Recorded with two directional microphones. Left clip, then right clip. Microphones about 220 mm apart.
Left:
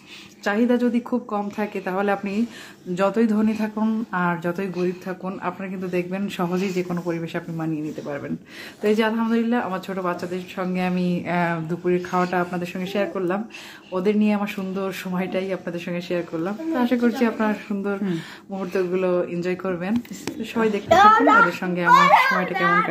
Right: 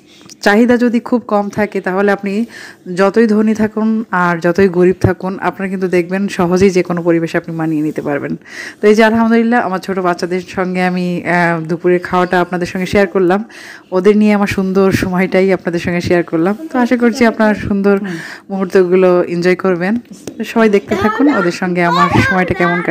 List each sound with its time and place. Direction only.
0.4 s a man's voice: 35° right (ahead or behind)